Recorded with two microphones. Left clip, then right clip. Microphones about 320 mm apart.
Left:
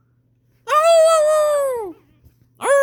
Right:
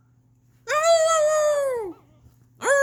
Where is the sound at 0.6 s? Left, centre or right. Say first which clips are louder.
Left 6 dB; centre.